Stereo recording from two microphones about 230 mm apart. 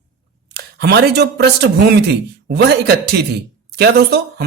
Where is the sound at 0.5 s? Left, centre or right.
Right.